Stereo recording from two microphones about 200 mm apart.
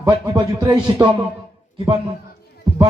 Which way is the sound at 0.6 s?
20° right (ahead or behind).